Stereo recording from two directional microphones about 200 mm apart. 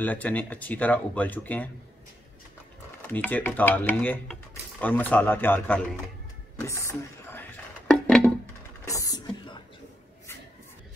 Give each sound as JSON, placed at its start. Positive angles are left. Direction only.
{"t": 0.0, "sound": "speech", "side_deg": 10}
{"t": 3.1, "sound": "speech", "side_deg": 10}
{"t": 7.9, "sound": "music", "side_deg": 5}
{"t": 8.8, "sound": "a sound", "side_deg": 15}